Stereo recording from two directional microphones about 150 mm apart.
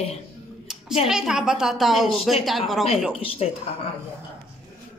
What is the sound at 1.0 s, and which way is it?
A woman's voice, 5° right (ahead or behind).